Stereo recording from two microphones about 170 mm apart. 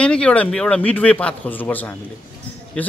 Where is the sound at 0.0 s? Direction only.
5° left (ahead or behind).